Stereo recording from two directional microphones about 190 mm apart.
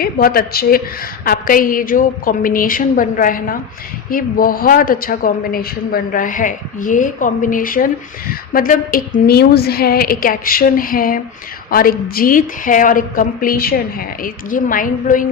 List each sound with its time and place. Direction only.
0.0 s a woman's voice: 50° left (ahead or behind)